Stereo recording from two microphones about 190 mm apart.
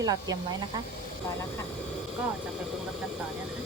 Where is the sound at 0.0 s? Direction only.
20° right (ahead or behind).